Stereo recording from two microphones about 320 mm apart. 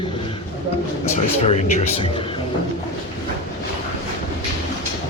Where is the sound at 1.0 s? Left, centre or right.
Centre.